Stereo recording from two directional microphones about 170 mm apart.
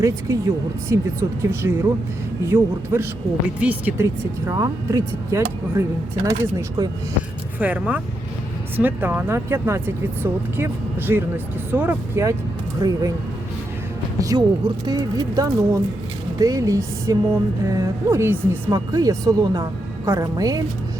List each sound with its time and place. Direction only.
0.0 s a woman's voice: 20° right (ahead or behind)
7.6 s a woman's voice: 10° right (ahead or behind)
14.2 s a woman's voice: 25° right (ahead or behind)